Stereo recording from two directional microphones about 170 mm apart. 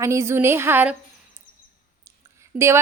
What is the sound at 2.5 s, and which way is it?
Speech, 15° right (ahead or behind).